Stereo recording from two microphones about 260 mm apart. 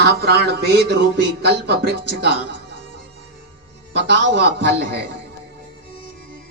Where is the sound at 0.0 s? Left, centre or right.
Right.